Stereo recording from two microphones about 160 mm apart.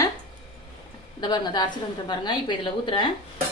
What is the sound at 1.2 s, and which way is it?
A woman's voice, 25° left (ahead or behind).